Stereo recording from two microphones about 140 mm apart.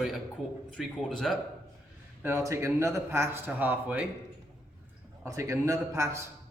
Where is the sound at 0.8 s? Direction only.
Centre (ahead or behind).